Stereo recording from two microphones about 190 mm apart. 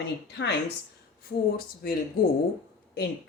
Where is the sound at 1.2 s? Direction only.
50° left (ahead or behind).